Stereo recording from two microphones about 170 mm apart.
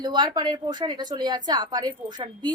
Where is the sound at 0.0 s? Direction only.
25° right (ahead or behind).